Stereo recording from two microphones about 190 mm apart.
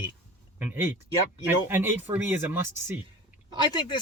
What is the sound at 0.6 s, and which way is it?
Speech, 10° right (ahead or behind).